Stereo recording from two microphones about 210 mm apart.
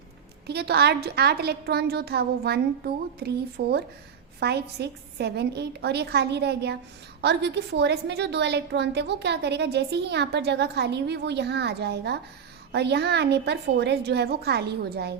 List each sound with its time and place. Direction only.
0.4 s a woman's voice: 50° right (ahead or behind)